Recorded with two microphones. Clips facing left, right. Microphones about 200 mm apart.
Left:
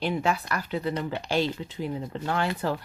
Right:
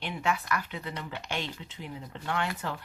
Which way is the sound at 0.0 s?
35° left (ahead or behind).